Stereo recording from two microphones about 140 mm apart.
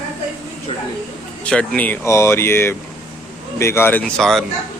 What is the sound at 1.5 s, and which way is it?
Speech, 10° left (ahead or behind).